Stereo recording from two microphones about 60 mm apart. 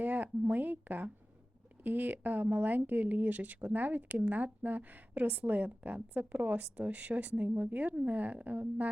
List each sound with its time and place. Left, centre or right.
0.0 s a woman's voice: right